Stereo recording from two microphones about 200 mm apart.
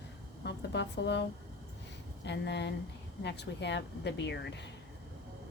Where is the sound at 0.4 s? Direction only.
60° left (ahead or behind).